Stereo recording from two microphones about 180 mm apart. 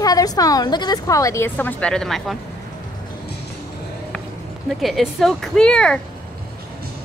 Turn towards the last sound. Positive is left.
turn(degrees=5)  # may be behind; listen again after turning